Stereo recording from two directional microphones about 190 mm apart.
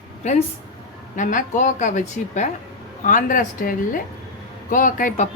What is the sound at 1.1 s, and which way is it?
A woman's voice, 40° left (ahead or behind).